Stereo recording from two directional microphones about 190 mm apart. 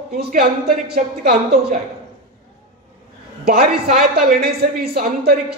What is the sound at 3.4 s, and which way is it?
Speech, 55° right (ahead or behind).